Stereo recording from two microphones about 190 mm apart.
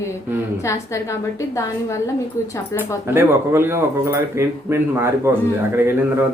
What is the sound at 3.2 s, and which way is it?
Speech, 15° right (ahead or behind).